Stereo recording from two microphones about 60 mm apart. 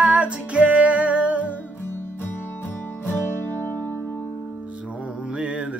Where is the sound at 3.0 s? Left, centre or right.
Left.